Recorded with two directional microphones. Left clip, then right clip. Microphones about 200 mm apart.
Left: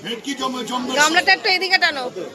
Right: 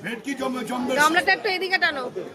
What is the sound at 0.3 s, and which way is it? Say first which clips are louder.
Speech: left 3 dB; 25° right (ahead or behind).